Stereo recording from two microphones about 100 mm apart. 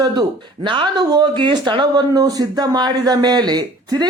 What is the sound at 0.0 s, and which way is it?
A woman's voice, 45° right (ahead or behind).